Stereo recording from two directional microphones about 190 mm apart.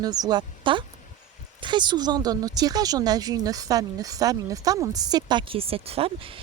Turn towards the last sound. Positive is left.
turn(degrees=-30)  # may be behind; listen again after turning